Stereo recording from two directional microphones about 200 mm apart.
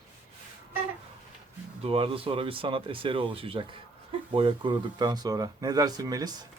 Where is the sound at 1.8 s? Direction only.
30° right (ahead or behind).